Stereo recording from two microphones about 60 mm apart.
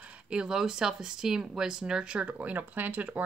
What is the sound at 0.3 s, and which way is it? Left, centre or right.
Speech, centre.